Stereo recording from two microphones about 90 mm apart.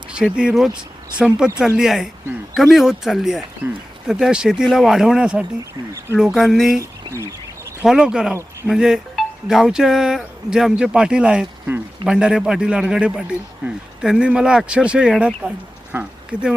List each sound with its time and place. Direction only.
0.3 s speech: 5° right (ahead or behind)
3.6 s speech: 20° right (ahead or behind)
4.0 s speech: 5° right (ahead or behind)
7.1 s speech: 40° left (ahead or behind)
7.9 s speech: 5° right (ahead or behind)
15.9 s speech: 20° right (ahead or behind)